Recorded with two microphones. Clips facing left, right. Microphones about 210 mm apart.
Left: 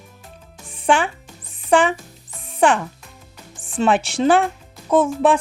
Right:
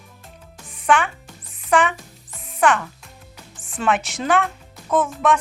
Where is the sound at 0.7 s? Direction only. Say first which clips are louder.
Left 1 dB; 30° left (ahead or behind).